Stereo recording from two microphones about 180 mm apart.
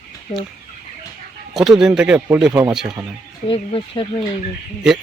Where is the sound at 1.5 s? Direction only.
Centre (ahead or behind).